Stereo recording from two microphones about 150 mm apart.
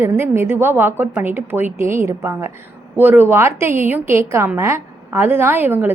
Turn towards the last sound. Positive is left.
turn(degrees=-15)  # may be behind; listen again after turning